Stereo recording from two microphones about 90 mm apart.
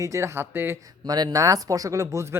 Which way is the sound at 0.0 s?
35° right (ahead or behind).